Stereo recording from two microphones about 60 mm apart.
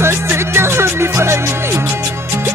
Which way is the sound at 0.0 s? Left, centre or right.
Right.